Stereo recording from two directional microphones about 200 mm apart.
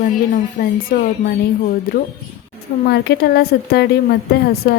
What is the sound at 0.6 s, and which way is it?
A woman's voice, 45° left (ahead or behind).